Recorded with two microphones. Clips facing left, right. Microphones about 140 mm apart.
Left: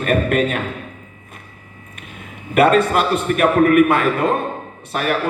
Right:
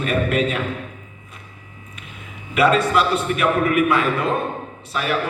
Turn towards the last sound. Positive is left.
turn(degrees=50)  # may be behind; listen again after turning